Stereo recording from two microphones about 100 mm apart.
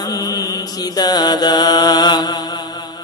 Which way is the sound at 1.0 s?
40° left (ahead or behind).